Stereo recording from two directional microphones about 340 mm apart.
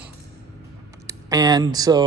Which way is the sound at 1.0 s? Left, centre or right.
Centre.